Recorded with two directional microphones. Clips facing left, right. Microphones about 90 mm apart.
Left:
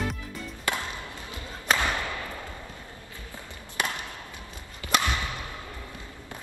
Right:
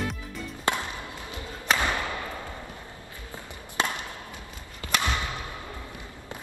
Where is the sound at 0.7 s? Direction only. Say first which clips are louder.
Right 3 dB; 25° right (ahead or behind).